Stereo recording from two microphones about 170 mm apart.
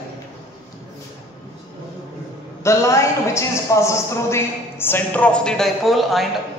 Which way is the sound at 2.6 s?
15° left (ahead or behind).